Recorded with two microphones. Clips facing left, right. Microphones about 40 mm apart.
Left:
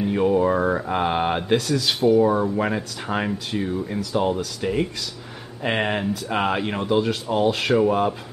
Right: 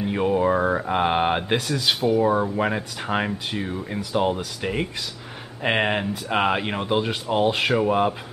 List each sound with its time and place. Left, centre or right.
0.0 s speech: centre